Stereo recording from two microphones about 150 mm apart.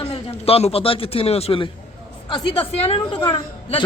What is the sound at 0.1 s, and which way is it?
A man's voice, 40° left (ahead or behind).